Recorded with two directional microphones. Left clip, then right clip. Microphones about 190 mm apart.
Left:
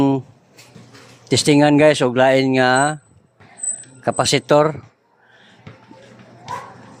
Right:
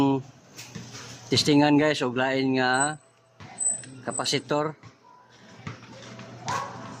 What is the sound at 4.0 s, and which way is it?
Speech, 45° left (ahead or behind).